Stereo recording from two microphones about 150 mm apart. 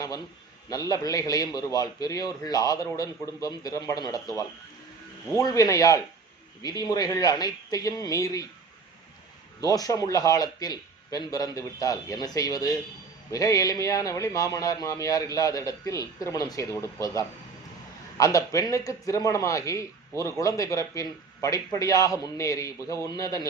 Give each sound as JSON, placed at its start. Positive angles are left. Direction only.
{"t": 0.7, "sound": "a man's voice", "side_deg": 25}
{"t": 9.6, "sound": "a man's voice", "side_deg": 25}